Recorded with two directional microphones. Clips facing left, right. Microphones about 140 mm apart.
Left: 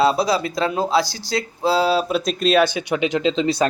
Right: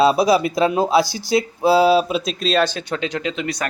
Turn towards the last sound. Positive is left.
turn(degrees=25)  # may be behind; listen again after turning